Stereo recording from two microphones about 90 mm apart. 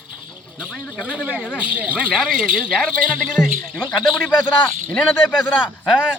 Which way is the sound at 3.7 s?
15° left (ahead or behind).